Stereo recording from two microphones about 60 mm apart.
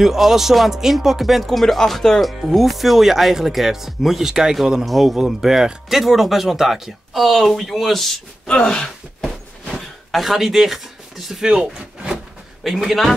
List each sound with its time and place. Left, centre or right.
0.0 s speech: centre
8.5 s speech: centre
9.7 s a sound: centre
11.5 s speech: centre
12.6 s speech: centre